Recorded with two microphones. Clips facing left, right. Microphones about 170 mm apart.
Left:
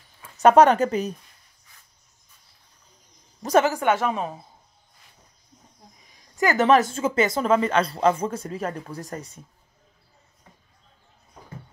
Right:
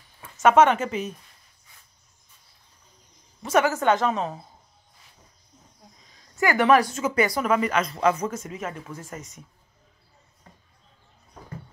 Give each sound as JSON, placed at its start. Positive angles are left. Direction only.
{"t": 0.4, "sound": "a woman's voice", "side_deg": 35}
{"t": 3.6, "sound": "a woman's voice", "side_deg": 10}
{"t": 6.0, "sound": "speech", "side_deg": 15}